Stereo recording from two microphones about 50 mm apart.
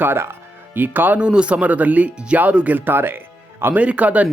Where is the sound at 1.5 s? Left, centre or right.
Right.